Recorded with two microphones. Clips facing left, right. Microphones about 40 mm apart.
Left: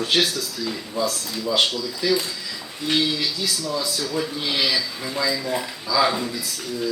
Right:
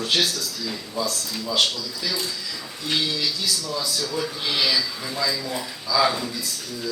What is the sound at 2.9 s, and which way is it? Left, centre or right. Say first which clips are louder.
A man's voice: left 2 dB; left.